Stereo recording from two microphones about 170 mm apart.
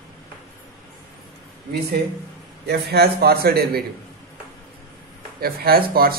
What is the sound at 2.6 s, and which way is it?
A man's voice, 65° right (ahead or behind).